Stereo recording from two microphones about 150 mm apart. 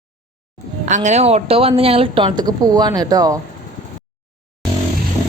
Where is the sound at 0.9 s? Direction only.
50° right (ahead or behind); by 3.3 s 25° right (ahead or behind).